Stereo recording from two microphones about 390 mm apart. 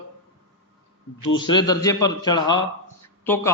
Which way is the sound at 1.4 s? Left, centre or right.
Centre.